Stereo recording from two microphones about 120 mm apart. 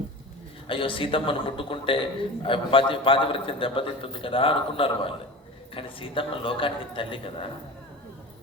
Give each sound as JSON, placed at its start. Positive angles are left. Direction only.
{"t": 0.7, "sound": "a man's voice", "side_deg": 45}